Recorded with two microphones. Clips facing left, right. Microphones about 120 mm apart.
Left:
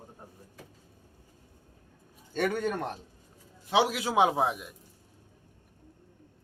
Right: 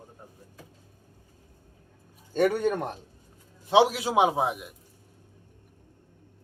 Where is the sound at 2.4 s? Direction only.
25° right (ahead or behind).